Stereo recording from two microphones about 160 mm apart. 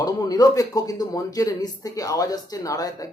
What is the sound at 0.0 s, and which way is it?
Speech, 25° left (ahead or behind).